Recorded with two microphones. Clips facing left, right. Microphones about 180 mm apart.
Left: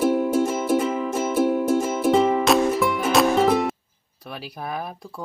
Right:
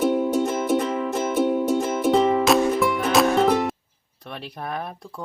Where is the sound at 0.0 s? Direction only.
Centre (ahead or behind).